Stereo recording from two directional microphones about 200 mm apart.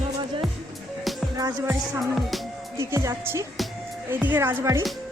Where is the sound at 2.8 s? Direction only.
15° right (ahead or behind).